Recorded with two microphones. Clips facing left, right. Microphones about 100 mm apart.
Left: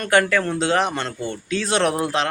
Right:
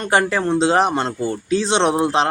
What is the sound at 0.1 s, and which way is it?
Speech, 30° right (ahead or behind).